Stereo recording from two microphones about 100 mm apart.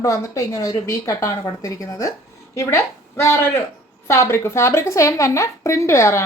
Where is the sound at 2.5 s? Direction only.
25° left (ahead or behind).